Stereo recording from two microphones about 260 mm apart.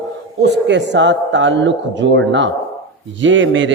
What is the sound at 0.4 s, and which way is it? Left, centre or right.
A man's voice, right.